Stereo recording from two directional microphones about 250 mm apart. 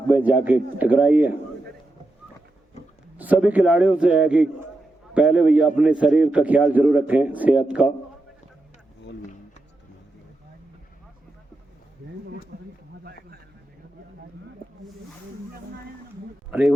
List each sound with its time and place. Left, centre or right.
0.1 s a man's voice: centre
3.2 s a man's voice: centre
12.5 s a sound: right
16.5 s speech: centre